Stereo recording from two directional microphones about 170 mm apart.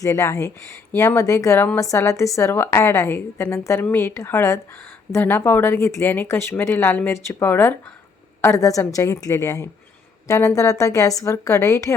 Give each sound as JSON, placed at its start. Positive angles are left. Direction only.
{"t": 0.0, "sound": "a woman's voice", "side_deg": 15}